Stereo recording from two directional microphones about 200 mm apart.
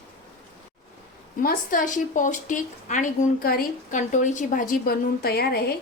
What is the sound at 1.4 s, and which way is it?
A woman's voice, 45° left (ahead or behind).